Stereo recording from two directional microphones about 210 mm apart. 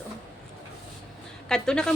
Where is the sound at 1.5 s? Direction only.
5° left (ahead or behind).